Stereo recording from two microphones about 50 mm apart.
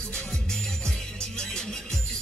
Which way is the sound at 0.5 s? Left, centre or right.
Centre.